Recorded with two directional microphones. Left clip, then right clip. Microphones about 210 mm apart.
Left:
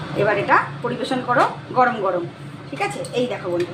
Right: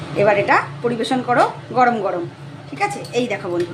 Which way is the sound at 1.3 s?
35° right (ahead or behind).